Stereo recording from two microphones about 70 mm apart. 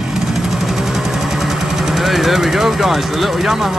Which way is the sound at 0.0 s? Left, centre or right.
Centre.